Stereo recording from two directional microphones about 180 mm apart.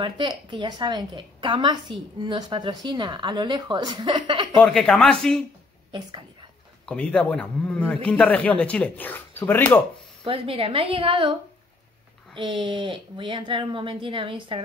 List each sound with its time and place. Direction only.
0.0 s a woman's voice: 25° right (ahead or behind)
4.6 s speech: 5° left (ahead or behind)
5.9 s a woman's voice: 25° right (ahead or behind)
6.9 s a man's voice: 5° left (ahead or behind)
10.2 s a woman's voice: 30° right (ahead or behind)
12.4 s a woman's voice: 25° right (ahead or behind)